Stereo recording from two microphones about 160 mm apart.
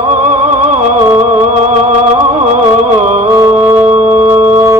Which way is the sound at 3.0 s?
45° right (ahead or behind).